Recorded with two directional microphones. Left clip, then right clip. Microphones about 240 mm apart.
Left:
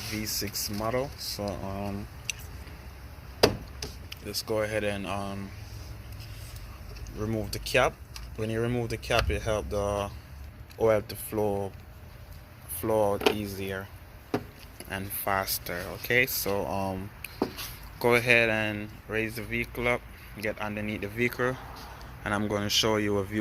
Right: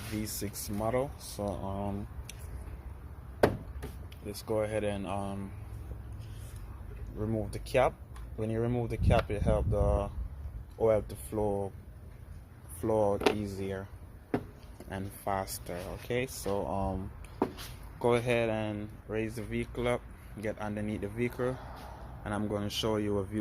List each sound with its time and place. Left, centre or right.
0.2 s speech: centre
4.1 s speech: centre
7.2 s speech: centre
12.8 s speech: centre
14.8 s speech: centre